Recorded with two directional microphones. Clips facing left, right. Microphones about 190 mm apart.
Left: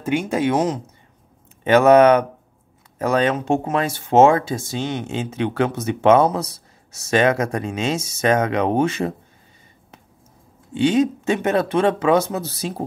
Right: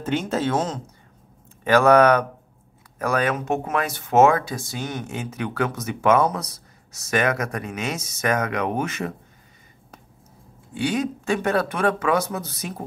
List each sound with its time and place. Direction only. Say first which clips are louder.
0.0 s speech: left 3 dB; 10° left (ahead or behind); by 9.1 s 30° left (ahead or behind)
10.7 s speech: left 7 dB; 25° left (ahead or behind)